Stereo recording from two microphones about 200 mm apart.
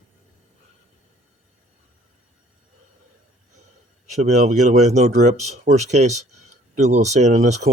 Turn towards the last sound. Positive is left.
turn(degrees=-35)  # may be behind; listen again after turning